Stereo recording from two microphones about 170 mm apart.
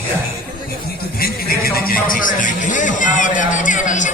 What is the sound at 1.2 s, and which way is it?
A man's voice, 60° left (ahead or behind).